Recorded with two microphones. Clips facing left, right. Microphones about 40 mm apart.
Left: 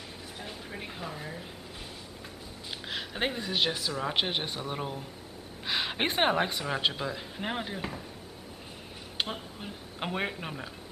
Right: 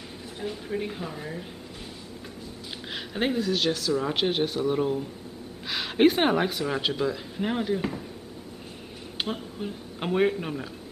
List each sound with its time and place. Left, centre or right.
0.4 s speech: centre
2.9 s a sound: centre
3.4 s speech: centre
9.2 s speech: centre